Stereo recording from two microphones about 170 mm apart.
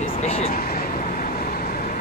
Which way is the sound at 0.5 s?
60° left (ahead or behind).